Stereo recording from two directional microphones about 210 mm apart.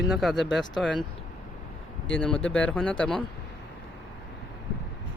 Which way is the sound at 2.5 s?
5° left (ahead or behind).